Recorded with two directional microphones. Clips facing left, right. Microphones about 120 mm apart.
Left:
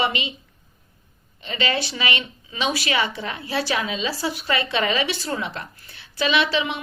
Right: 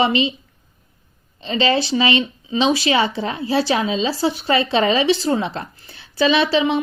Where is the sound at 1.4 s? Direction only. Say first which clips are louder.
Right 7 dB; 30° right (ahead or behind).